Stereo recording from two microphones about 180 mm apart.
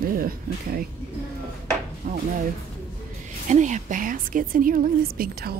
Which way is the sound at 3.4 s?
40° right (ahead or behind).